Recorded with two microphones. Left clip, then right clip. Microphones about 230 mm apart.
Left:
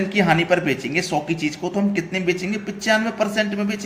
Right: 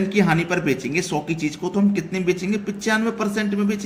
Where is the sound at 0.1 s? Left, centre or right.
Centre.